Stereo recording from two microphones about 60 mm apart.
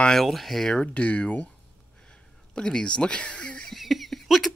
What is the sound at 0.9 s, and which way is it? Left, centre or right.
Speech, left.